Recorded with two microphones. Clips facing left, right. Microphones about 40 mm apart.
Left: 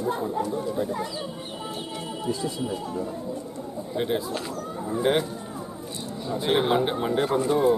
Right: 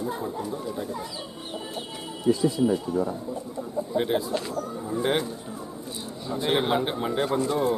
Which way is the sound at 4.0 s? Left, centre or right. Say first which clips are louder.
Even; centre.